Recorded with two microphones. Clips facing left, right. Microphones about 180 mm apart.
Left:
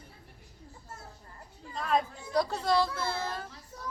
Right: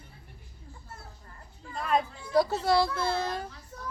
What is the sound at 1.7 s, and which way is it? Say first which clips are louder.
A child's voice: right 1 dB; centre (ahead or behind).